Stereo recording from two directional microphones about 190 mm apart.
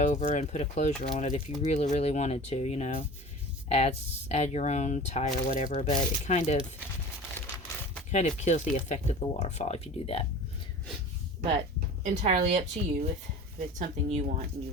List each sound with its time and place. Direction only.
0.0 s speech: 40° left (ahead or behind)
8.1 s speech: 40° left (ahead or behind)
12.0 s a woman's voice: 35° right (ahead or behind)